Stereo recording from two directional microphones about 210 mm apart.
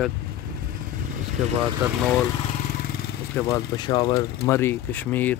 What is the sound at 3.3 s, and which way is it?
Speech, 15° left (ahead or behind).